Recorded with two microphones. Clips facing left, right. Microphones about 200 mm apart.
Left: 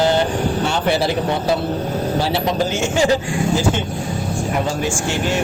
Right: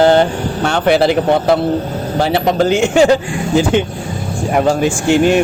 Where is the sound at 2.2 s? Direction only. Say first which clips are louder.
Right 8 dB; 60° right (ahead or behind).